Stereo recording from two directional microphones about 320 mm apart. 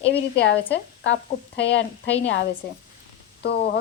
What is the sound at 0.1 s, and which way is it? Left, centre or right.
Speech, left.